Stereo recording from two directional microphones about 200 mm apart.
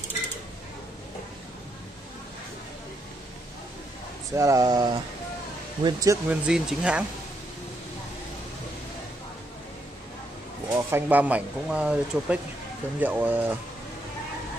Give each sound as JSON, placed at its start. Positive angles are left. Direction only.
{"t": 4.3, "sound": "speech", "side_deg": -15}
{"t": 6.4, "sound": "speech", "side_deg": -5}
{"t": 10.7, "sound": "speech", "side_deg": -10}